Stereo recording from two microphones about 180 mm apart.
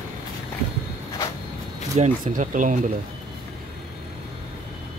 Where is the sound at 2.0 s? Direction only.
35° right (ahead or behind).